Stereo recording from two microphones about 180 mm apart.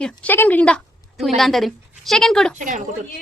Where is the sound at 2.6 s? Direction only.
45° right (ahead or behind).